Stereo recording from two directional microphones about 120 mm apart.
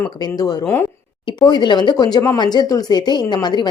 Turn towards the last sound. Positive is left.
turn(degrees=40)  # may be behind; listen again after turning